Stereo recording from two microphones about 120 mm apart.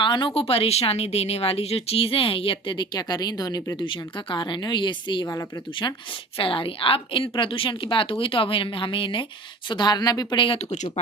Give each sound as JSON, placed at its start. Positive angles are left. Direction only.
{"t": 0.0, "sound": "a woman's voice", "side_deg": 40}
{"t": 6.3, "sound": "a woman's voice", "side_deg": 50}